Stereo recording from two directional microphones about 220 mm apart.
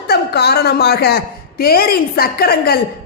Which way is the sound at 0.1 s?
45° left (ahead or behind).